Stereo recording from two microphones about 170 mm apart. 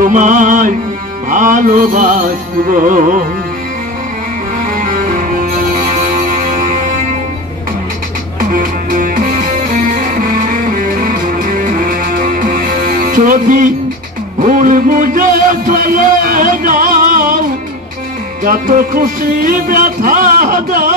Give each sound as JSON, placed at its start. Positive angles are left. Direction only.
{"t": 0.0, "sound": "music", "side_deg": -50}
{"t": 4.7, "sound": "music", "side_deg": -50}
{"t": 8.5, "sound": "music", "side_deg": -55}
{"t": 18.4, "sound": "music", "side_deg": -55}